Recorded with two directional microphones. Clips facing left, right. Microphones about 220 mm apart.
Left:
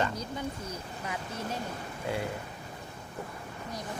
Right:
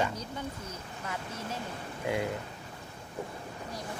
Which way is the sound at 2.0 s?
15° right (ahead or behind).